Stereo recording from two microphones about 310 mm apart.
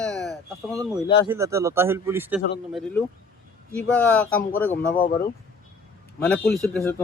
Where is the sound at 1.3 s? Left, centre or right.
Centre.